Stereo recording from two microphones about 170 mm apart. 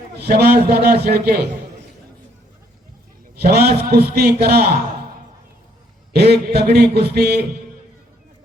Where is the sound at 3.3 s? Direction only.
65° right (ahead or behind).